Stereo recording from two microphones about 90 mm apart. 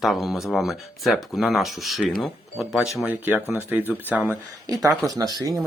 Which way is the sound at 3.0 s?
20° right (ahead or behind).